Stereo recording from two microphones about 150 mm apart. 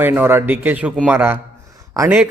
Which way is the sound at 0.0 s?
15° right (ahead or behind).